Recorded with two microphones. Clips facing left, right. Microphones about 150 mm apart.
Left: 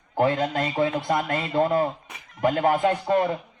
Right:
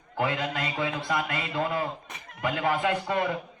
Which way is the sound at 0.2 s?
45° left (ahead or behind).